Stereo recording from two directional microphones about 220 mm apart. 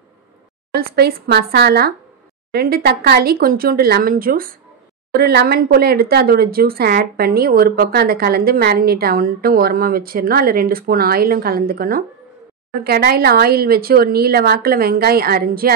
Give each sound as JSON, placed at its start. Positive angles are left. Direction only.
{"t": 0.7, "sound": "speech", "side_deg": -45}